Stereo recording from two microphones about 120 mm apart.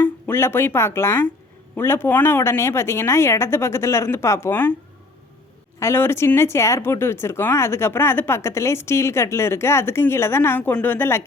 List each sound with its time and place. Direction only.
0.0 s speech: 20° left (ahead or behind)
5.8 s speech: 20° left (ahead or behind)